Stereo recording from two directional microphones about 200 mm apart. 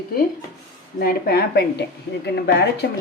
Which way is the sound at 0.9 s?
50° left (ahead or behind).